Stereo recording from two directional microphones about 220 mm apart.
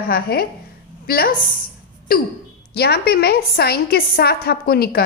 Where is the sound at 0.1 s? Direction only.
45° left (ahead or behind).